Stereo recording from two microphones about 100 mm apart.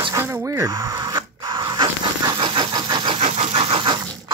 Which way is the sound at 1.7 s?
55° right (ahead or behind).